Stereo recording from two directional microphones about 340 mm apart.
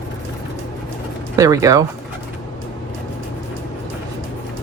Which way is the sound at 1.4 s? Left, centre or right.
Centre.